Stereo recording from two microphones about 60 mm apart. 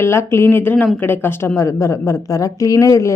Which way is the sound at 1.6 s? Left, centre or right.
Left.